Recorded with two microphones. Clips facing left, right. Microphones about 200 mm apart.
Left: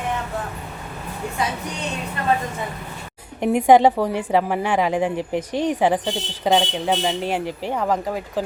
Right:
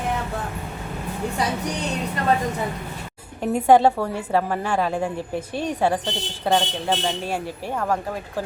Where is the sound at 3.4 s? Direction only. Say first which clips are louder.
Left 2 dB; 15° left (ahead or behind).